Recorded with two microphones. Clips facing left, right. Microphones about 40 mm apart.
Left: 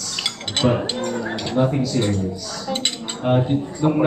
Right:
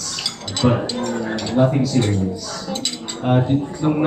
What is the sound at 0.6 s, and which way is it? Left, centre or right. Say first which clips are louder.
A man's voice: right 2 dB; centre.